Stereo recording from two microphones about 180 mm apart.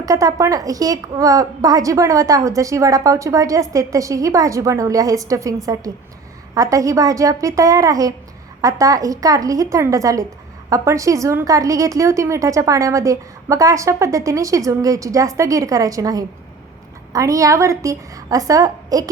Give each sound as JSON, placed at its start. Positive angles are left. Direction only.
{"t": 0.0, "sound": "a woman's voice", "side_deg": -20}